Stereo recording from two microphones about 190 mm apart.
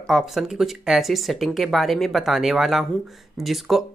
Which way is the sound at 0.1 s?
Centre (ahead or behind).